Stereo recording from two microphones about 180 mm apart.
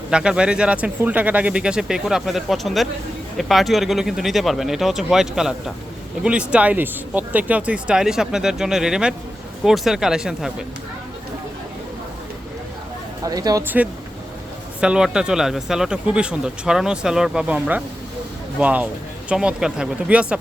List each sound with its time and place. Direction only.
0.1 s speech: 5° right (ahead or behind)
13.2 s speech: 20° right (ahead or behind)